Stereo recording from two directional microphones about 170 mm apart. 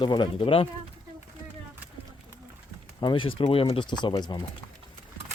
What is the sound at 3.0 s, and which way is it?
Speech, 30° left (ahead or behind).